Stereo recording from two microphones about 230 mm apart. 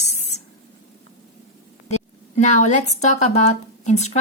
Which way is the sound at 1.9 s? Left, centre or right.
Left.